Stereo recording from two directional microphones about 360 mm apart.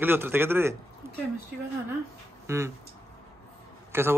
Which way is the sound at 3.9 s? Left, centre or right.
Centre.